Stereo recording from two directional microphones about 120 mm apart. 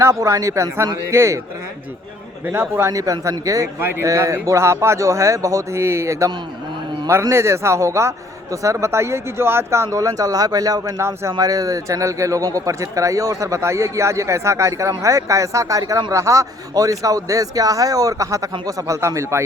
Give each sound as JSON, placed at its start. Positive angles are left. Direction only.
{"t": 0.0, "sound": "speech", "side_deg": -25}
{"t": 2.5, "sound": "speech", "side_deg": -20}